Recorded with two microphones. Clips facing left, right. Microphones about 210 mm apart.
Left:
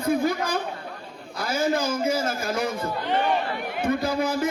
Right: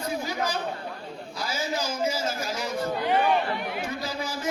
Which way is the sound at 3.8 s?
55° left (ahead or behind).